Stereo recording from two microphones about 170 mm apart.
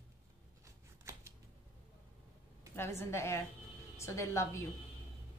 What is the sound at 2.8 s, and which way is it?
A woman's voice, 15° left (ahead or behind).